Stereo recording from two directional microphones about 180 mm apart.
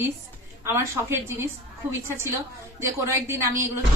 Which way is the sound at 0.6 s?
15° right (ahead or behind).